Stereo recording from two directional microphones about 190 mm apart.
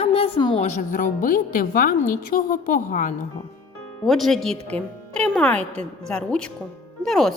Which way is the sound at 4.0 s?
Centre (ahead or behind).